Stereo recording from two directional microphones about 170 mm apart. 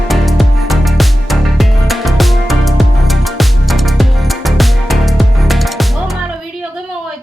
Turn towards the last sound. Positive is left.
turn(degrees=0)  # may be behind; listen again after turning